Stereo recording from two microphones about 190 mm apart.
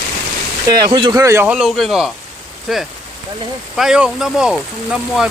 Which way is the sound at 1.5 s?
Centre (ahead or behind).